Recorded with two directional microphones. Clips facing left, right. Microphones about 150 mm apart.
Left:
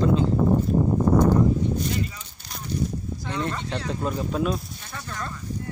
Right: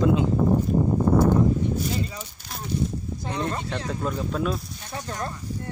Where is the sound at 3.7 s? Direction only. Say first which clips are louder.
Left 1 dB; 10° left (ahead or behind).